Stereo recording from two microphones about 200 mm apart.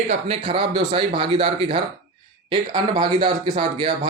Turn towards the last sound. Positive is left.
turn(degrees=-25)  # may be behind; listen again after turning